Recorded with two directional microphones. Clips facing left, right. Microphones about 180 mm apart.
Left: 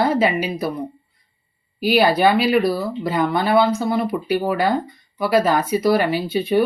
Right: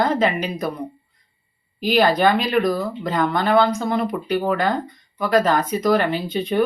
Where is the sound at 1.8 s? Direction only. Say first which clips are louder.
Left 1 dB; 10° left (ahead or behind).